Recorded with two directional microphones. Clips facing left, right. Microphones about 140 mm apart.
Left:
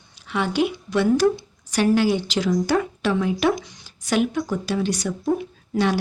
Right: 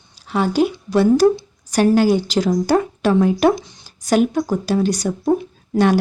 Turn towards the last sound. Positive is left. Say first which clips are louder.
# right 6 dB
turn(degrees=-45)  # may be behind; listen again after turning